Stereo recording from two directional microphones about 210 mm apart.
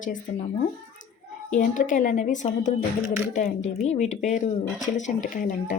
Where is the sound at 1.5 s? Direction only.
35° left (ahead or behind).